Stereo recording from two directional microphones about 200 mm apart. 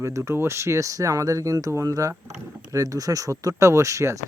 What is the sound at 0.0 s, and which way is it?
Speech, 15° right (ahead or behind).